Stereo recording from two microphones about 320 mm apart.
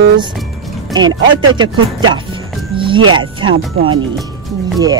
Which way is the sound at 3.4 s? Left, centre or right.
Right.